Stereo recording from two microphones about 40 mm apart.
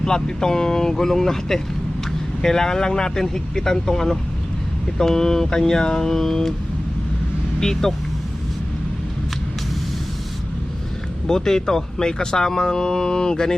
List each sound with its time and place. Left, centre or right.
0.0 s speech: centre
7.6 s speech: centre
11.3 s speech: centre